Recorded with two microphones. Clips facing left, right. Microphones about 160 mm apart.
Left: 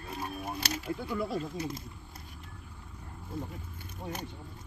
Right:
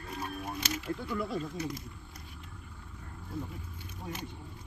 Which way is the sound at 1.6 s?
25° left (ahead or behind).